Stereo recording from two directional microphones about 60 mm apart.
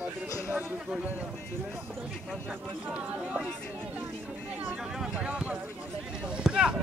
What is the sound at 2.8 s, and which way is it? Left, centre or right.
Speech, right.